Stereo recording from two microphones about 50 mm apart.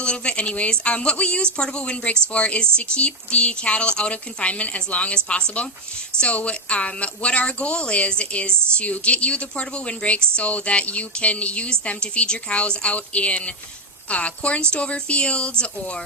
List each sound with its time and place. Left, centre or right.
0.0 s speech: left